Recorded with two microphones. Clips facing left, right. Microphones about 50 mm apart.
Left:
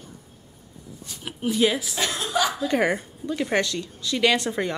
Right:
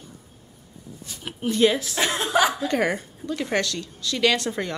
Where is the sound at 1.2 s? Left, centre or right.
Centre.